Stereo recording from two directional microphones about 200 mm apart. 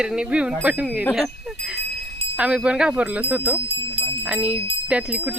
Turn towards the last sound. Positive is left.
turn(degrees=-5)  # may be behind; listen again after turning